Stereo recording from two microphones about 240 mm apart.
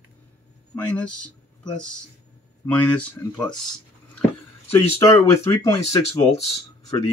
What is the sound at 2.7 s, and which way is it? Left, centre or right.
Speech, centre.